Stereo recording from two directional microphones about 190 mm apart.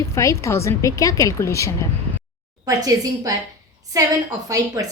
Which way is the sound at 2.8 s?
20° right (ahead or behind).